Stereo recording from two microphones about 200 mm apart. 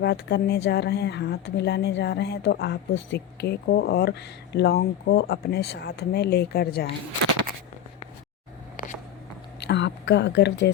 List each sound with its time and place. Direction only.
0.0 s speech: 55° left (ahead or behind)
9.6 s speech: 60° left (ahead or behind)